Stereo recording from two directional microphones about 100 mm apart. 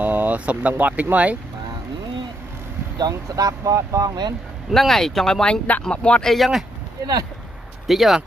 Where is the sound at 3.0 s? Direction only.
40° right (ahead or behind).